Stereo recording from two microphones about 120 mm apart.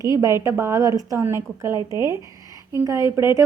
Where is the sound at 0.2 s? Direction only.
25° right (ahead or behind).